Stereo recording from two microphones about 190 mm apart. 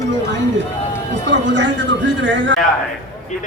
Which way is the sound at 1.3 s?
70° right (ahead or behind).